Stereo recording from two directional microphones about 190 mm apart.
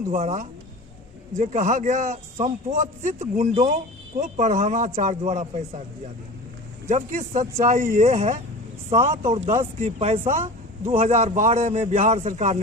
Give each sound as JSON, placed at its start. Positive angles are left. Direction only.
{"t": 0.1, "sound": "a man's voice", "side_deg": -40}
{"t": 6.8, "sound": "a man's voice", "side_deg": -40}